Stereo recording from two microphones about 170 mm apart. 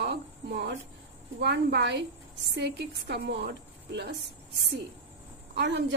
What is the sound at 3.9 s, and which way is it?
Speech, 90° right.